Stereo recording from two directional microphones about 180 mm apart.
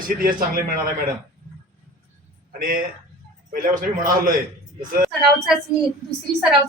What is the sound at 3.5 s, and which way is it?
Speech, 50° right (ahead or behind).